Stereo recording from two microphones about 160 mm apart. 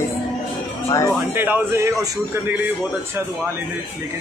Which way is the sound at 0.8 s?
20° left (ahead or behind).